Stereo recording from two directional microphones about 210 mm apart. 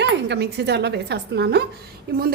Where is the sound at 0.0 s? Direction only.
55° right (ahead or behind).